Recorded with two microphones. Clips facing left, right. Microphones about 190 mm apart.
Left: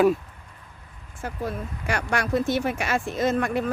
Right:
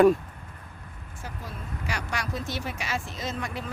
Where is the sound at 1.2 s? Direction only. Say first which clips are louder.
Left 10 dB; 55° left (ahead or behind).